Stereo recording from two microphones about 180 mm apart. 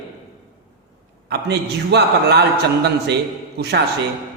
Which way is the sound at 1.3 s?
65° right (ahead or behind).